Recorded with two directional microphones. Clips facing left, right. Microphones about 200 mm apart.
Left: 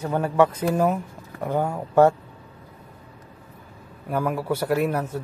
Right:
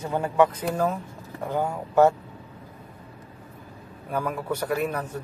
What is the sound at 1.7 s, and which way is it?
Speech, 10° right (ahead or behind).